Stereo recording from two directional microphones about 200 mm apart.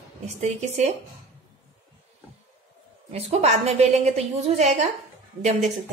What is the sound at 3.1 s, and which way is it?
A woman's voice, 30° right (ahead or behind).